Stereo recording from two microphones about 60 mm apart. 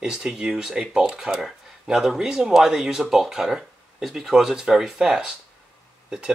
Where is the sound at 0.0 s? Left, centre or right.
Centre.